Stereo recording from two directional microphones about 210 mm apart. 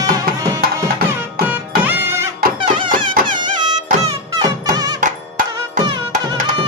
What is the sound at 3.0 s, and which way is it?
Music, 40° right (ahead or behind).